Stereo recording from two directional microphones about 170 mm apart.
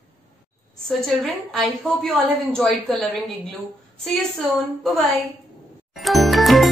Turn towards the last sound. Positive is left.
turn(degrees=0)  # may be behind; listen again after turning